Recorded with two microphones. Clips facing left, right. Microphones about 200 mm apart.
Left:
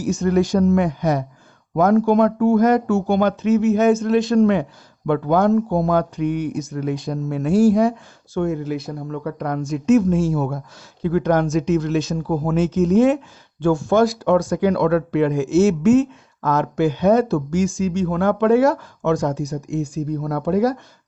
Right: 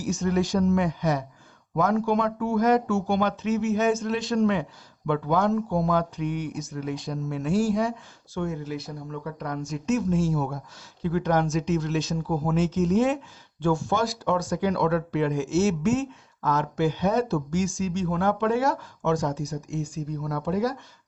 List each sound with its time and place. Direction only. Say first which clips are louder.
0.2 s speech: left 6 dB; 55° left (ahead or behind)
11.0 s speech: left 6 dB; 55° left (ahead or behind)